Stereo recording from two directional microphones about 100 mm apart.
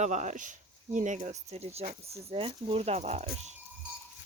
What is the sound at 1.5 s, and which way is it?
Speech, 90° right.